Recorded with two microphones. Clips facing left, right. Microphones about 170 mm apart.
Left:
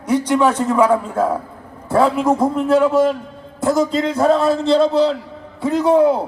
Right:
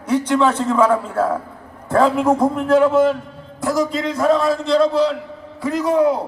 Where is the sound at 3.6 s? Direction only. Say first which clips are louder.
Left 3 dB; 25° left (ahead or behind).